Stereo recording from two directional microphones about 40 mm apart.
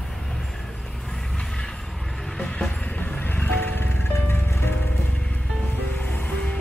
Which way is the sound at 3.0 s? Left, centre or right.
Left.